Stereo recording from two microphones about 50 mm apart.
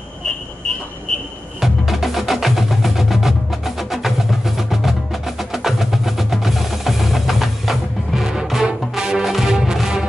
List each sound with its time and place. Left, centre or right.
1.6 s music: centre